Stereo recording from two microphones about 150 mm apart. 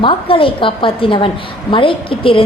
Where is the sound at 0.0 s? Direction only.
35° left (ahead or behind).